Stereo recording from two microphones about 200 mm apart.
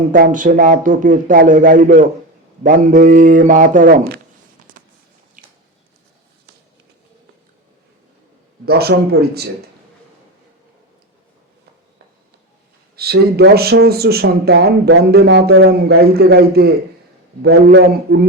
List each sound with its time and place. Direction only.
0.1 s speech: 40° right (ahead or behind)
4.7 s a sound: 40° right (ahead or behind)
5.4 s squish: 40° right (ahead or behind)
8.6 s speech: 50° right (ahead or behind)
13.0 s a man's voice: 50° right (ahead or behind)